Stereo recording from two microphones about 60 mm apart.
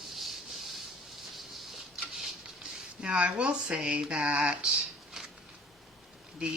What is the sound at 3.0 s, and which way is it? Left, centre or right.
Speech, centre.